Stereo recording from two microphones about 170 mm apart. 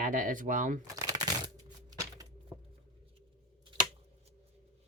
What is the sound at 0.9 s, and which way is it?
Shuffling cards, 20° right (ahead or behind).